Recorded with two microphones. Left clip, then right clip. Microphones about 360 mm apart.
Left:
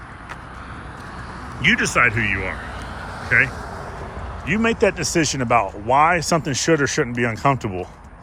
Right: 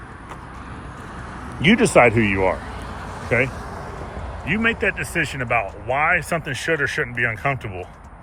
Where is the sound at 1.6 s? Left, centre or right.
Centre.